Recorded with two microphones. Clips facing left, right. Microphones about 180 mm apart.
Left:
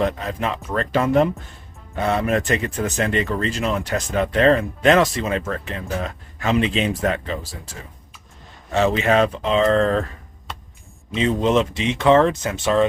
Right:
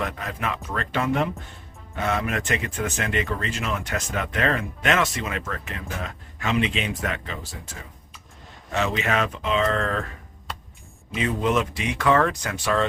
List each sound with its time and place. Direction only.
0.0 s speech: 30° left (ahead or behind)
11.1 s speech: 25° left (ahead or behind)